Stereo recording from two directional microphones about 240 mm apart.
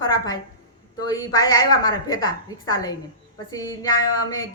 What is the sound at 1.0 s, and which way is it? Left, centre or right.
A woman's voice, centre.